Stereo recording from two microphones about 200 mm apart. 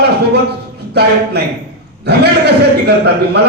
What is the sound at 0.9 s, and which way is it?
A man's voice, 55° right (ahead or behind).